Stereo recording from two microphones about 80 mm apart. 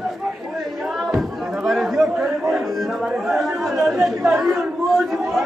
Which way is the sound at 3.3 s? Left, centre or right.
Centre.